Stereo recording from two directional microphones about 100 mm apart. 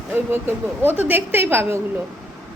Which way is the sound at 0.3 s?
20° right (ahead or behind).